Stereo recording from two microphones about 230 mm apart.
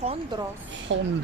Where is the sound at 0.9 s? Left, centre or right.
Right.